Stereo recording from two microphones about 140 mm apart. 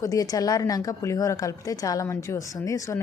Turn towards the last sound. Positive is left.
turn(degrees=20)  # may be behind; listen again after turning